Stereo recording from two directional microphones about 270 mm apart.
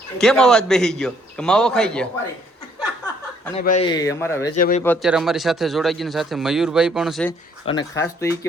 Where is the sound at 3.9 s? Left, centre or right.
Centre.